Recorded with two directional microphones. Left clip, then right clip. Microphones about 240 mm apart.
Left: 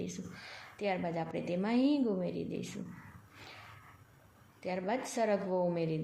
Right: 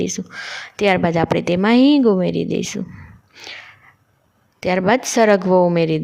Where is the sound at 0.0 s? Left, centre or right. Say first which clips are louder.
Right 19 dB; right.